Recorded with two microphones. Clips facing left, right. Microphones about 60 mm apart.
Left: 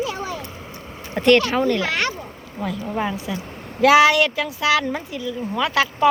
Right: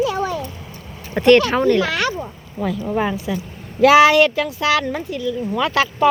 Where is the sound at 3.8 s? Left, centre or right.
Centre.